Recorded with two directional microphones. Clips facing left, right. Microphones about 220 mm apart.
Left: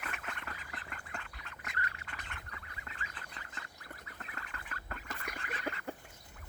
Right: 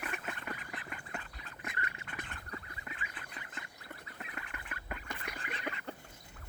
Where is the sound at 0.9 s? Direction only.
10° right (ahead or behind).